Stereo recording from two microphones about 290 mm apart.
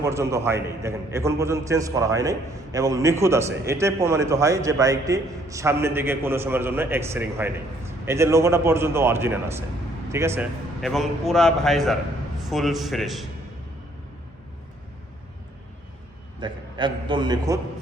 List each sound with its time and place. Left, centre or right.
0.0 s a man's voice: centre
16.4 s a man's voice: centre